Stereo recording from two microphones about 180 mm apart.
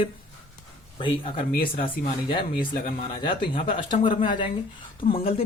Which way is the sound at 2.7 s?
30° left (ahead or behind).